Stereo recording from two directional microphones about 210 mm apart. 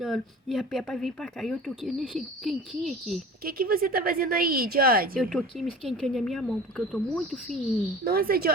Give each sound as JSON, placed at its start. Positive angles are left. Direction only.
{"t": 0.0, "sound": "speech", "side_deg": 0}
{"t": 3.4, "sound": "a woman's voice", "side_deg": -45}
{"t": 5.2, "sound": "speech", "side_deg": 0}
{"t": 8.0, "sound": "a woman's voice", "side_deg": -45}